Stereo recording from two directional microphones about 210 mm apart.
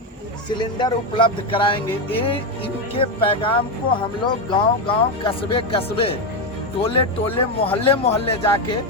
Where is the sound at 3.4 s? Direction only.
25° left (ahead or behind).